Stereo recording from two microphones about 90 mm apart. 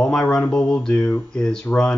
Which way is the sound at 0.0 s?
5° left (ahead or behind).